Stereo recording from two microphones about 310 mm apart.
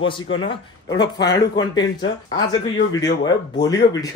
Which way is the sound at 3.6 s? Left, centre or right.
Centre.